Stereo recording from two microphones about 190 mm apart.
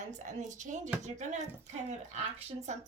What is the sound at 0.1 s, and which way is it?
A woman's voice, 40° right (ahead or behind).